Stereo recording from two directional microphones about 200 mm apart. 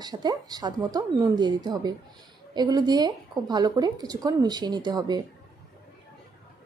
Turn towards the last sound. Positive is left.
turn(degrees=-20)  # may be behind; listen again after turning